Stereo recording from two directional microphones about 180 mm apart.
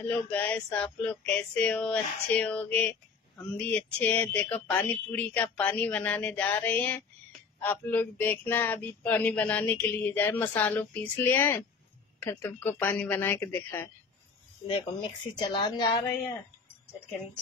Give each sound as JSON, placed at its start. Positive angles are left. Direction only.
{"t": 0.0, "sound": "speech", "side_deg": 10}
{"t": 14.7, "sound": "a woman's voice", "side_deg": 25}